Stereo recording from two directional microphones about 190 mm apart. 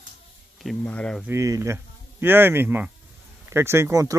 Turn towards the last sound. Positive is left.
turn(degrees=-15)  # may be behind; listen again after turning